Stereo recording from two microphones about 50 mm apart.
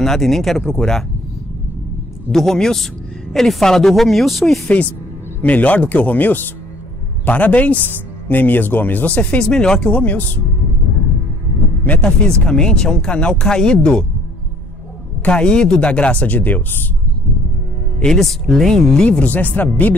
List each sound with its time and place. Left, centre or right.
0.0 s a woman's voice: centre
2.3 s a woman's voice: centre
5.4 s speech: left
9.5 s speech: centre
9.9 s speech: left
11.8 s speech: left
12.3 s speech: centre
15.2 s speech: centre
16.3 s speech: left
18.0 s speech: centre
19.0 s speech: left